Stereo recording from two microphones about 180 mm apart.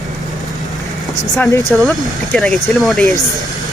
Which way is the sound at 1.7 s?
10° left (ahead or behind).